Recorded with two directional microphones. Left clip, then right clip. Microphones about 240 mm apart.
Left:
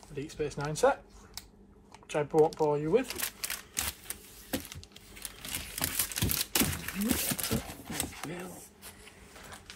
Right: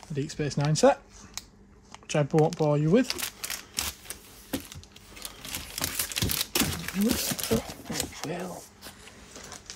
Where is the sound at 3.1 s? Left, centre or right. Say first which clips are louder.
Right 4 dB; centre.